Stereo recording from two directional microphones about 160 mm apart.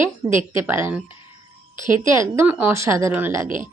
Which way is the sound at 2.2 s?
15° right (ahead or behind).